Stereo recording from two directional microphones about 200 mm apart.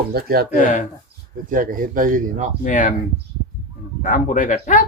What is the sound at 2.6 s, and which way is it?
Speech, 40° left (ahead or behind).